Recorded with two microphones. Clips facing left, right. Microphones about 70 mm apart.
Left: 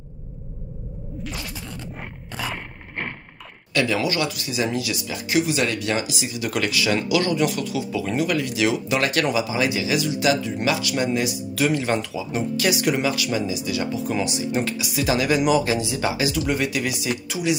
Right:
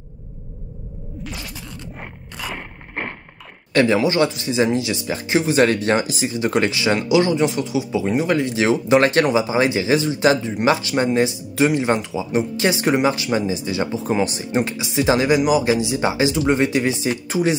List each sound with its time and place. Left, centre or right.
1.2 s a sound: centre
3.7 s speech: right
14.6 s speech: right